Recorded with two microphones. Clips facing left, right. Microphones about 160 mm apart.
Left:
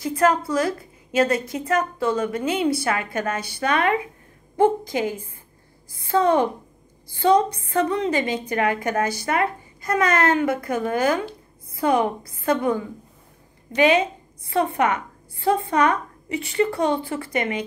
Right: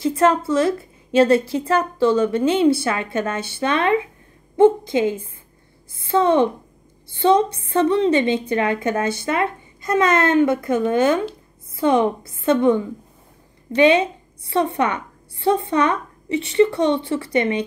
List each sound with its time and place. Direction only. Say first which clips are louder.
0.0 s a woman's voice: right 3 dB; 30° right (ahead or behind)